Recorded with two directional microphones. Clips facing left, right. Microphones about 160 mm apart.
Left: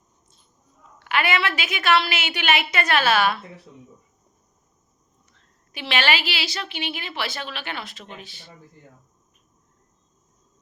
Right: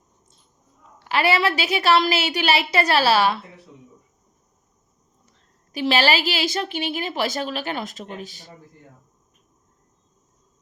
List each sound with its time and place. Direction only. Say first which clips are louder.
0.9 s a woman's voice: right 3 dB; 35° right (ahead or behind)
5.7 s a woman's voice: right 4 dB; 35° right (ahead or behind)